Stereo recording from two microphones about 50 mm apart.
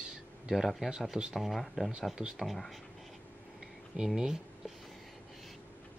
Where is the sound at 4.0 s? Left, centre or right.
Centre.